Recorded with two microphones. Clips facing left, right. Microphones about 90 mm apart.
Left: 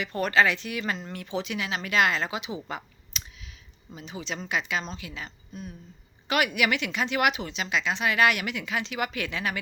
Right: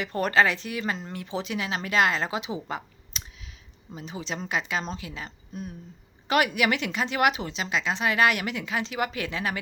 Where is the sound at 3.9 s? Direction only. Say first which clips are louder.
Right 1 dB; 35° right (ahead or behind).